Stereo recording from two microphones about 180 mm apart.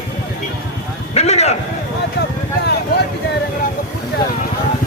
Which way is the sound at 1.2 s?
35° left (ahead or behind).